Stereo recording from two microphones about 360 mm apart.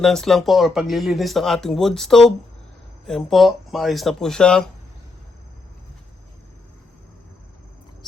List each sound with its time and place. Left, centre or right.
0.0 s speech: centre